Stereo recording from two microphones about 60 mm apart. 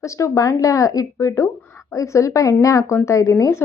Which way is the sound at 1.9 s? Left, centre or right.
Left.